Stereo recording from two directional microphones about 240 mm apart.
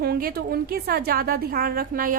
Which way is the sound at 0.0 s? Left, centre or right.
Right.